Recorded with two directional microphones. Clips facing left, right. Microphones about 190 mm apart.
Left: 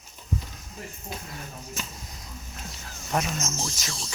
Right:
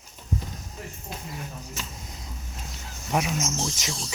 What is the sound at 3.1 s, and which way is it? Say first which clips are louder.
Speech: right 2 dB; 10° right (ahead or behind).